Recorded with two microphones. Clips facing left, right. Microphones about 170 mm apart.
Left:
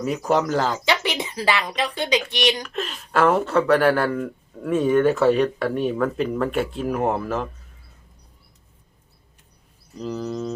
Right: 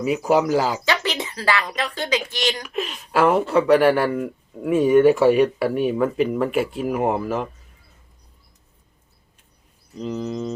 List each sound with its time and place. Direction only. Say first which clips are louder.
0.0 s speech: right 3 dB; 5° right (ahead or behind)
0.9 s speech: even; 15° left (ahead or behind)
2.6 s speech: right 2 dB; 5° right (ahead or behind)
10.0 s speech: right 1 dB; centre (ahead or behind)